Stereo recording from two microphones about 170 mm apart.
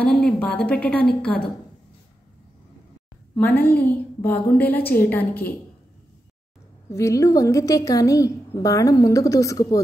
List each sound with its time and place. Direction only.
0.0 s a woman's voice: 5° left (ahead or behind)
3.3 s a woman's voice: 10° left (ahead or behind)
6.9 s a woman's voice: 15° left (ahead or behind)